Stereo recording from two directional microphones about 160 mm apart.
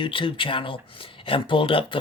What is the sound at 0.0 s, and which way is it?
Speech, 30° left (ahead or behind).